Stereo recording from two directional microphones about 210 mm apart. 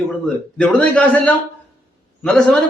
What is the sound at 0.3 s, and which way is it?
A man's voice, 5° left (ahead or behind).